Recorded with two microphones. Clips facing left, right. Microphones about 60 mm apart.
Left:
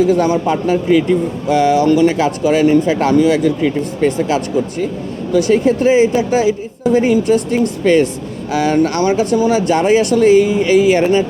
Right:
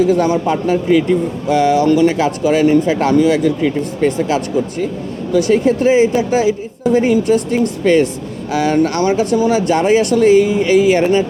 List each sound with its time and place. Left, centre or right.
0.0 s a woman's voice: left
11.0 s speech: left